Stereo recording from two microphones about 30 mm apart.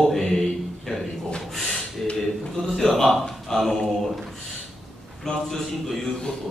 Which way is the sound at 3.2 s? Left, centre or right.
Centre.